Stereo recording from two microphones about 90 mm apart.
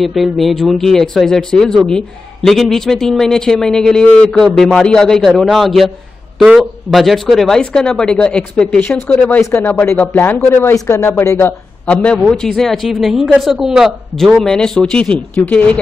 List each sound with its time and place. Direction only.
0.0 s speech: centre (ahead or behind); by 11.5 s 30° left (ahead or behind)
11.8 s speech: 15° left (ahead or behind)